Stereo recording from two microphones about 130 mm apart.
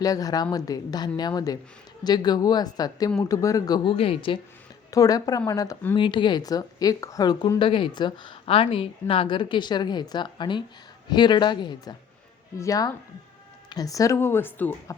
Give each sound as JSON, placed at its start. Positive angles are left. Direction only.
{"t": 0.0, "sound": "a woman's voice", "side_deg": 30}
{"t": 3.8, "sound": "speech", "side_deg": 45}
{"t": 4.9, "sound": "speech", "side_deg": 25}
{"t": 5.9, "sound": "speech", "side_deg": 35}
{"t": 7.6, "sound": "a woman's voice", "side_deg": 40}